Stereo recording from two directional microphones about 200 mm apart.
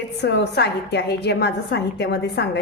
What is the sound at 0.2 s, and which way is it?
A woman's voice, 55° left (ahead or behind).